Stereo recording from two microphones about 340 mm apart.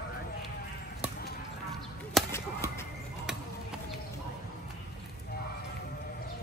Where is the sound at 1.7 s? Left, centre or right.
Centre.